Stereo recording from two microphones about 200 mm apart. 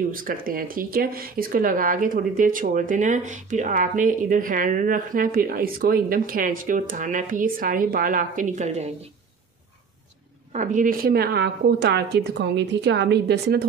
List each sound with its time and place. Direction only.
0.1 s speech: 45° right (ahead or behind)
10.5 s a woman's voice: 40° right (ahead or behind); by 13.7 s 55° right (ahead or behind)